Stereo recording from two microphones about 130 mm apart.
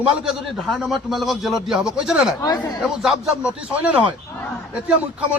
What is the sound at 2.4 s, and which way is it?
Speech, 30° left (ahead or behind).